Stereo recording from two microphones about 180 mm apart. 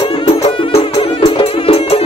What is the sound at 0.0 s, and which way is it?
Music, 30° left (ahead or behind).